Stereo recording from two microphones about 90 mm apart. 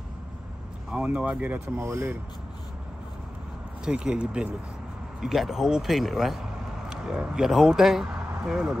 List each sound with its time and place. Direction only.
0.9 s speech: 15° right (ahead or behind)
1.8 s speech: 30° right (ahead or behind)
3.8 s speech: 10° right (ahead or behind)